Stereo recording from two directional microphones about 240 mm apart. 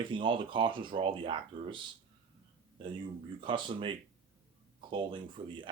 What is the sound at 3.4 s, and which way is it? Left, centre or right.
Speech, right.